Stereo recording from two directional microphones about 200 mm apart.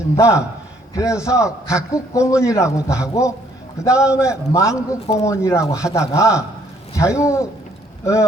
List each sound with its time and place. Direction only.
0.2 s a man's voice: 15° left (ahead or behind)